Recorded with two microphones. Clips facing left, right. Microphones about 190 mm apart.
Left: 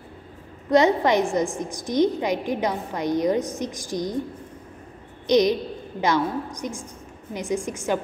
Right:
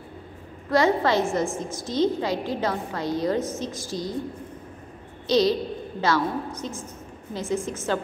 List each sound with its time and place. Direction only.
0.7 s a woman's voice: 20° left (ahead or behind)
5.2 s a woman's voice: 20° left (ahead or behind)